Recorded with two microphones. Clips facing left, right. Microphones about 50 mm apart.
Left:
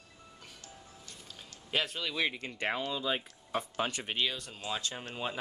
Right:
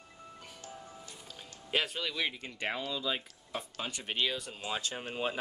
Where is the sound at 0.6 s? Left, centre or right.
Right.